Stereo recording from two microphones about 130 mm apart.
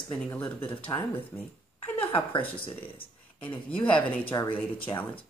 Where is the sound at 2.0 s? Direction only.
40° left (ahead or behind).